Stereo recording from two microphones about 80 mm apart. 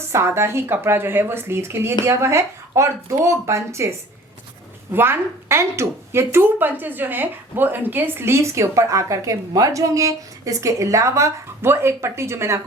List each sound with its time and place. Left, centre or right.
0.1 s speech: right
4.9 s speech: right